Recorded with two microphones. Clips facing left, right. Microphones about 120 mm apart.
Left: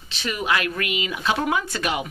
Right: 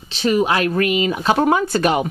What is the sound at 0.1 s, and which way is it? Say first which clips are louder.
Speech: right 8 dB; 35° right (ahead or behind).